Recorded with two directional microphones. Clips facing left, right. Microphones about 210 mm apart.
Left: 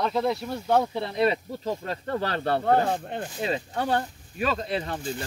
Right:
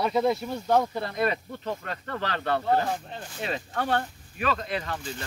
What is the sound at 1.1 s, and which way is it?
Speech, 20° left (ahead or behind).